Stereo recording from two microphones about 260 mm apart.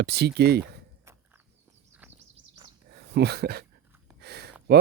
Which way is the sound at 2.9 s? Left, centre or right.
Right.